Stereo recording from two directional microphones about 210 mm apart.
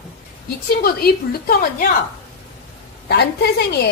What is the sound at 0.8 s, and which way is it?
A woman's voice, 45° left (ahead or behind).